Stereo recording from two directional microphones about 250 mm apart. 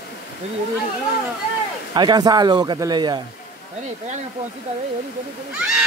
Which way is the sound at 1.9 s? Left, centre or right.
Centre.